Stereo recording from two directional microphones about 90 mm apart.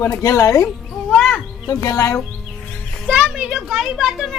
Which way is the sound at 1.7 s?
45° left (ahead or behind).